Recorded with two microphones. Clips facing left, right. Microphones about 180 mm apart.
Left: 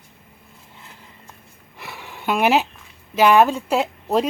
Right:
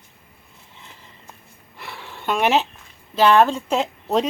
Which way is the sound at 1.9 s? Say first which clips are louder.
Left 1 dB; 10° left (ahead or behind).